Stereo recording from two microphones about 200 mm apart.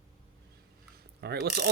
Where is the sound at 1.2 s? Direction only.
55° right (ahead or behind).